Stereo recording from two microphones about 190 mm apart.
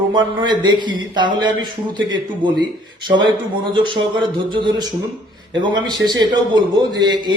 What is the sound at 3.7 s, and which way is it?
Speech, 25° right (ahead or behind).